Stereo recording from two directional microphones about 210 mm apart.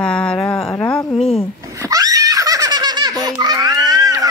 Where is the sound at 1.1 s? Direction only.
30° left (ahead or behind).